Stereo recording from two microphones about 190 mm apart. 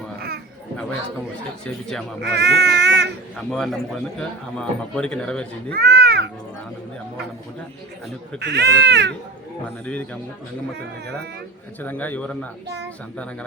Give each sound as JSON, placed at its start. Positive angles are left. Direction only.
{"t": 1.6, "sound": "a man's voice", "side_deg": 5}
{"t": 2.2, "sound": "speech", "side_deg": -60}
{"t": 3.5, "sound": "a man's voice", "side_deg": 0}
{"t": 5.7, "sound": "a sound", "side_deg": -55}
{"t": 8.4, "sound": "speech", "side_deg": -60}
{"t": 9.8, "sound": "a man's voice", "side_deg": 5}
{"t": 10.8, "sound": "speech", "side_deg": -60}
{"t": 11.8, "sound": "a man's voice", "side_deg": 10}
{"t": 12.6, "sound": "a child's voice", "side_deg": -65}